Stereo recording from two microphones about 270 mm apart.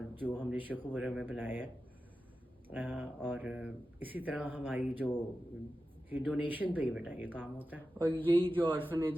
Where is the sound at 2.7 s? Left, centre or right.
Centre.